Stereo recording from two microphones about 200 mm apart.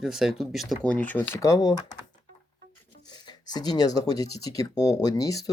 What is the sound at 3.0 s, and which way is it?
Speech, 20° left (ahead or behind).